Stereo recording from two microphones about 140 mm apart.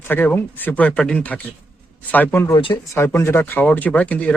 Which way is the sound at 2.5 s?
30° left (ahead or behind).